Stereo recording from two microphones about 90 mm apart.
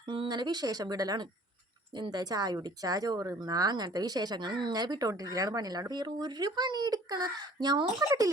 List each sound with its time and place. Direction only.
0.3 s speech: 50° right (ahead or behind)